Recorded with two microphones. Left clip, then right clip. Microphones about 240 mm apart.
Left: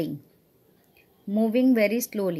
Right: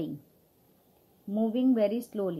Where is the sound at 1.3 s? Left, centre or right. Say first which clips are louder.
Left 5 dB; left.